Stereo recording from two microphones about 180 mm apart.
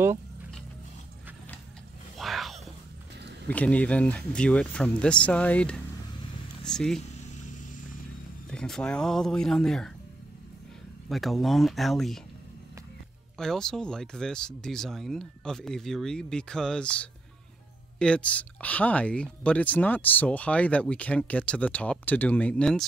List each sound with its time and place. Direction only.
2.1 s a sound: centre (ahead or behind)
3.4 s speech: 10° left (ahead or behind)
8.5 s speech: 5° left (ahead or behind)
11.1 s speech: centre (ahead or behind)
13.4 s speech: 5° left (ahead or behind)